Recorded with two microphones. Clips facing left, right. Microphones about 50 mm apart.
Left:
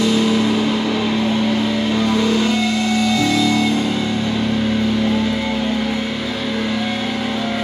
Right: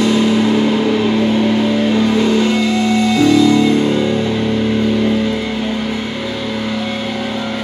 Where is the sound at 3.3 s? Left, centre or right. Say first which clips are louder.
Right 5 dB; centre.